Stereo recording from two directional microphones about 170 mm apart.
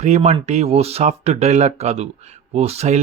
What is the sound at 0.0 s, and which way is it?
A man's voice, 40° right (ahead or behind).